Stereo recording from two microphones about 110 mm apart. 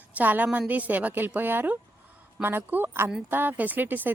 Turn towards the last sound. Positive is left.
turn(degrees=-15)  # may be behind; listen again after turning